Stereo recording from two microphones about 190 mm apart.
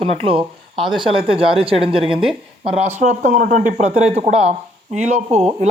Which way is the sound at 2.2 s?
5° right (ahead or behind).